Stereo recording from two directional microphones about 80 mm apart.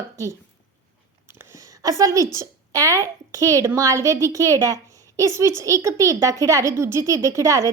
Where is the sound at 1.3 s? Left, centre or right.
Right.